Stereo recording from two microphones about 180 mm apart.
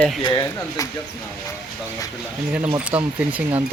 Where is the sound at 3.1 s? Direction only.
10° right (ahead or behind).